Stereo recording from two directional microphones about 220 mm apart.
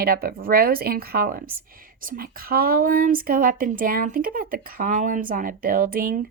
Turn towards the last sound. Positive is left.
turn(degrees=-40)  # may be behind; listen again after turning